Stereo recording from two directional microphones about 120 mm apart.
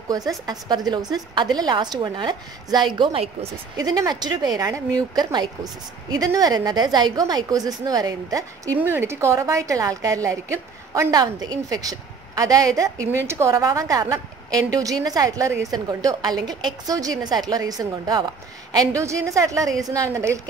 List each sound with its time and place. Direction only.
0.5 s speech: 35° right (ahead or behind)
3.7 s speech: 35° right (ahead or behind)
8.7 s a woman's voice: 20° right (ahead or behind)
12.9 s a woman's voice: 15° left (ahead or behind)
13.3 s a woman's voice: 25° right (ahead or behind)